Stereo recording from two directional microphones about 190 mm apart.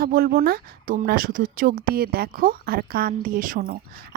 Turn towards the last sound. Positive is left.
turn(degrees=-45)  # may be behind; listen again after turning